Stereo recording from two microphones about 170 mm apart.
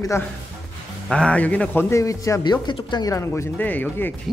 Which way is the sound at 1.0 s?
5° left (ahead or behind).